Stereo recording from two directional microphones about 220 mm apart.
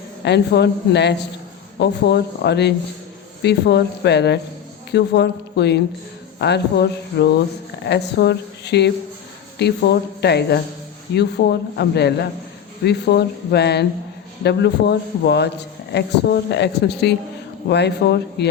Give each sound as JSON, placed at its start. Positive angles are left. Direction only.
{"t": 0.3, "sound": "a man's voice", "side_deg": 50}